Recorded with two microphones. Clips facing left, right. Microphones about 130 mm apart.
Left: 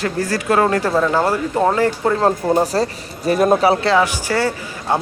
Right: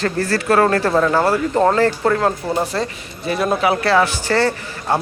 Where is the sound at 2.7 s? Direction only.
40° left (ahead or behind).